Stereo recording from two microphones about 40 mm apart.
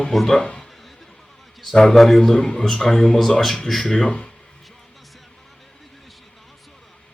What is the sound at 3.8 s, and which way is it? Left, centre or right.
Speech, centre.